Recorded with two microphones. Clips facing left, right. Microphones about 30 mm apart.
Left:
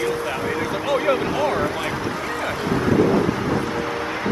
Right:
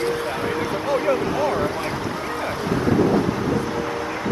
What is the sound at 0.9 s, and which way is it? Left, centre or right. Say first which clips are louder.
Speech: left 1 dB; left.